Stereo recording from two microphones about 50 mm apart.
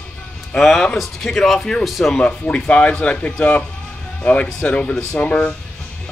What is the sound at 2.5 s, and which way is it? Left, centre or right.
Speech, left.